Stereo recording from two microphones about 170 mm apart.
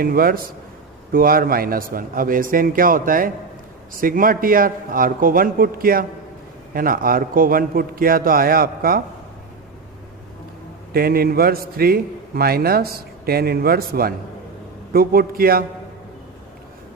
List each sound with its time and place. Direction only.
0.0 s a man's voice: 60° right (ahead or behind)
10.9 s a man's voice: 60° right (ahead or behind)